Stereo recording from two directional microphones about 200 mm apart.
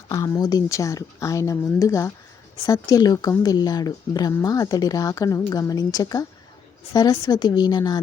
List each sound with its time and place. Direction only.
0.1 s speech: 20° left (ahead or behind)